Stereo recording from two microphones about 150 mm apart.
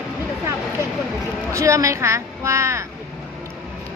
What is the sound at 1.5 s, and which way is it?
Speech, 20° right (ahead or behind).